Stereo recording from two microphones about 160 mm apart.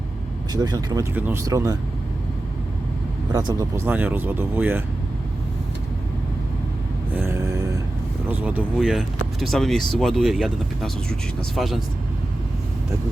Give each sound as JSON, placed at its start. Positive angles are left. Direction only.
{"t": 0.5, "sound": "speech", "side_deg": -25}
{"t": 3.3, "sound": "speech", "side_deg": -20}
{"t": 7.1, "sound": "a sound", "side_deg": -10}
{"t": 8.3, "sound": "speech", "side_deg": -10}